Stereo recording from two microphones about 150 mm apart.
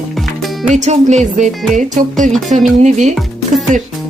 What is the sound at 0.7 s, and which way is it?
Speech, 50° right (ahead or behind).